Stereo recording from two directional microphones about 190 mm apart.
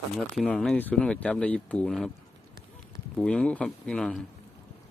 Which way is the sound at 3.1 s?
5° left (ahead or behind).